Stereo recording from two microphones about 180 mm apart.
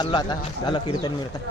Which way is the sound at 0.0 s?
25° left (ahead or behind).